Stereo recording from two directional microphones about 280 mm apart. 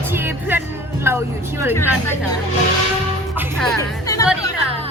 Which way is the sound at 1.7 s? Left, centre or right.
Centre.